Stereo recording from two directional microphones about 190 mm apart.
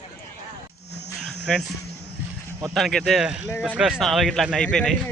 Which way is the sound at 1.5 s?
5° left (ahead or behind).